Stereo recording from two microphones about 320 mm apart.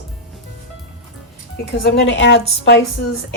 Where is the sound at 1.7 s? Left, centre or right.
Left.